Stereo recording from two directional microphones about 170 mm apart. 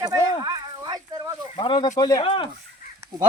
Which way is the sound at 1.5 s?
30° left (ahead or behind).